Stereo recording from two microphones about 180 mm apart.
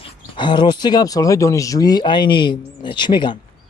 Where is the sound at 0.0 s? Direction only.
25° left (ahead or behind).